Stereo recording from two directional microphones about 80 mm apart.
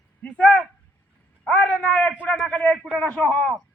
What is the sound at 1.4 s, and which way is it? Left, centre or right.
Speech, centre.